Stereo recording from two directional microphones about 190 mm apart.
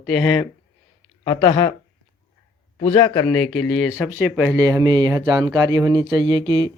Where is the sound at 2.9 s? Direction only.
15° left (ahead or behind).